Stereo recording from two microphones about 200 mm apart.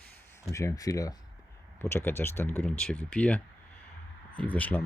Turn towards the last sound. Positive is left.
turn(degrees=10)  # may be behind; listen again after turning